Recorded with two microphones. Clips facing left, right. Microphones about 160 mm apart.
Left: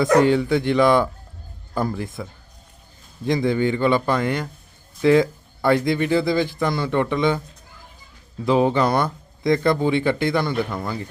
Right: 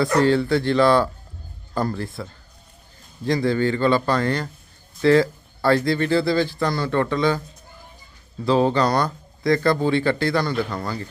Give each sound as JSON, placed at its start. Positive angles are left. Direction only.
{"t": 0.2, "sound": "speech", "side_deg": 15}
{"t": 2.0, "sound": "speech", "side_deg": 15}
{"t": 8.4, "sound": "speech", "side_deg": 15}